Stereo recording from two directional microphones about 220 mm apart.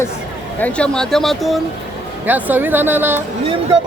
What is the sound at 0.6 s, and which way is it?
Speech, 5° left (ahead or behind).